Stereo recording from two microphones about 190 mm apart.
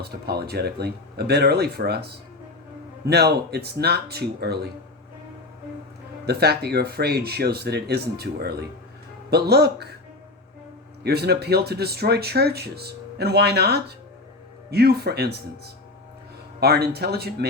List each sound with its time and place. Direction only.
0.0 s speech: 55° right (ahead or behind)
6.2 s speech: 55° right (ahead or behind)
11.0 s speech: 55° right (ahead or behind)